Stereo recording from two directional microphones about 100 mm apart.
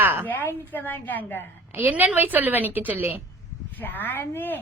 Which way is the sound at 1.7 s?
20° right (ahead or behind).